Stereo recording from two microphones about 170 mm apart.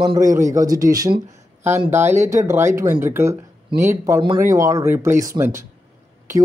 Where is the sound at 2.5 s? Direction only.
15° right (ahead or behind).